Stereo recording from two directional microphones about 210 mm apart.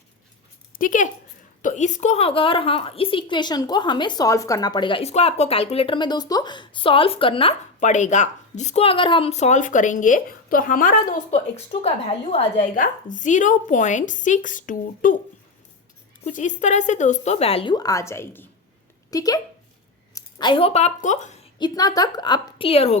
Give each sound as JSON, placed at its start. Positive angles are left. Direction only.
{"t": 0.8, "sound": "a woman's voice", "side_deg": 40}
{"t": 16.2, "sound": "a woman's voice", "side_deg": 35}
{"t": 21.6, "sound": "a woman's voice", "side_deg": 20}